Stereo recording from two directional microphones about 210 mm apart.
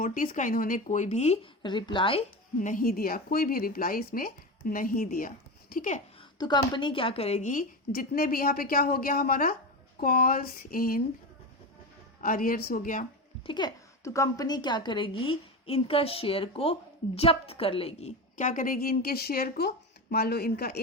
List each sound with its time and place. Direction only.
0.0 s speech: 40° left (ahead or behind); by 2.2 s 25° left (ahead or behind)
2.6 s a woman's voice: 40° left (ahead or behind)
6.4 s a woman's voice: 20° left (ahead or behind); by 11.0 s 45° left (ahead or behind)
12.2 s speech: 40° left (ahead or behind)
13.5 s a woman's voice: 20° left (ahead or behind); by 20.8 s 50° left (ahead or behind)